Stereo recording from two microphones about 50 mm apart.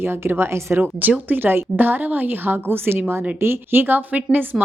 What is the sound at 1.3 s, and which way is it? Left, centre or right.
A woman's voice, right.